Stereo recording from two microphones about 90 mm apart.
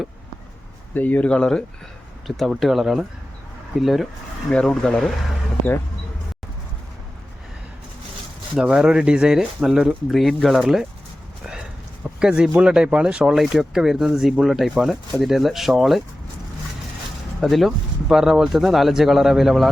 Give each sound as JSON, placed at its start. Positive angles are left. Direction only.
{"t": 0.9, "sound": "speech", "side_deg": 15}
{"t": 8.5, "sound": "speech", "side_deg": -5}
{"t": 12.2, "sound": "speech", "side_deg": -10}
{"t": 17.4, "sound": "speech", "side_deg": 0}